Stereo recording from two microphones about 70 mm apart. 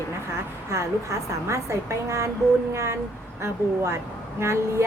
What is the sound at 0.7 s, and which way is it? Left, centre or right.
A woman's voice, right.